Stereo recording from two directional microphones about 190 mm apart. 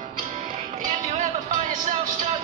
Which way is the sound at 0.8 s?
40° right (ahead or behind).